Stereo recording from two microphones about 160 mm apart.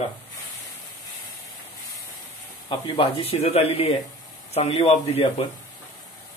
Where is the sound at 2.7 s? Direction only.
35° left (ahead or behind).